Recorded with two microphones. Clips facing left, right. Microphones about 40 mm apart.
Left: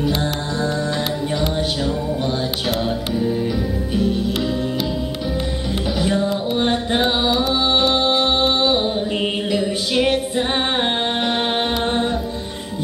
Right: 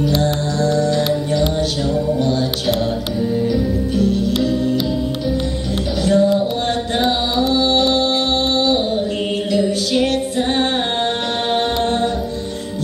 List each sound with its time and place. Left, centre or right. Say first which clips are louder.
0.0 s music: right 4 dB; centre
3.2 s music: right 4 dB; centre
5.9 s music: right 7 dB; centre
6.9 s mantra: even; centre
7.9 s music: even; centre